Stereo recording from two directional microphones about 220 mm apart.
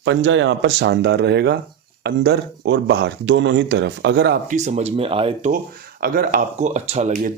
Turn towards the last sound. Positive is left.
turn(degrees=-35)  # may be behind; listen again after turning